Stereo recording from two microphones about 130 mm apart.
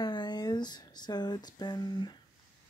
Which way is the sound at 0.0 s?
35° left (ahead or behind).